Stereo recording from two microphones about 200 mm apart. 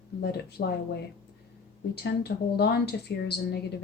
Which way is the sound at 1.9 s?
55° left (ahead or behind).